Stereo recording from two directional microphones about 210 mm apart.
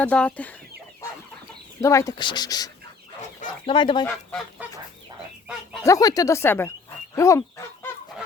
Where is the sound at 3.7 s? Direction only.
25° left (ahead or behind).